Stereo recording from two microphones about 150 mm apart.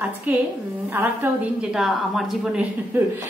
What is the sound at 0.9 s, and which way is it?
Speech, 15° right (ahead or behind).